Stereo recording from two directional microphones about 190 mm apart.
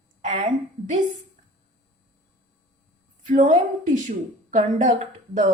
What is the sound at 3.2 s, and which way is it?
A woman's voice, 40° right (ahead or behind).